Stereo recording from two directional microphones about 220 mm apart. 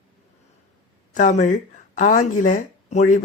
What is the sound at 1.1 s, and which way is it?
A woman's voice, 35° left (ahead or behind).